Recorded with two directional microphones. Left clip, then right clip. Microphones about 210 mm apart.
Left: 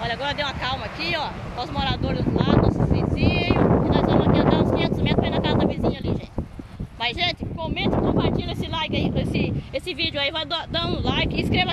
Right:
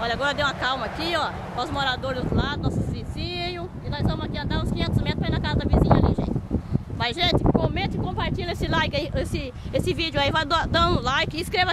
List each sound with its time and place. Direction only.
0.2 s speech: 10° right (ahead or behind)
1.8 s a sound: 10° right (ahead or behind)
7.0 s speech: 15° right (ahead or behind)
8.7 s speech: 20° right (ahead or behind)
10.1 s speech: 25° right (ahead or behind)